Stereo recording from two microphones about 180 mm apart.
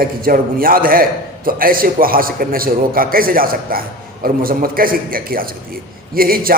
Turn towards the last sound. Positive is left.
turn(degrees=-55)  # may be behind; listen again after turning